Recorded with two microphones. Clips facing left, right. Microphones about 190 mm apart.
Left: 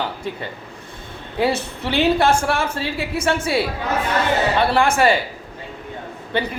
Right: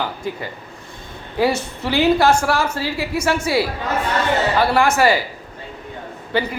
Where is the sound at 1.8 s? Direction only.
25° left (ahead or behind).